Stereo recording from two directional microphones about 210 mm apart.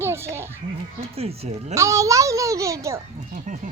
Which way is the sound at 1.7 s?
15° right (ahead or behind).